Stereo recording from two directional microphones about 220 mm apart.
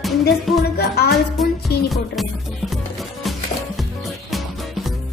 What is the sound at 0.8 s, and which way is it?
Music, 45° left (ahead or behind).